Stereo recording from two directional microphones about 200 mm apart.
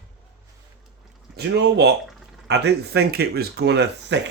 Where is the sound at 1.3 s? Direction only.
55° right (ahead or behind).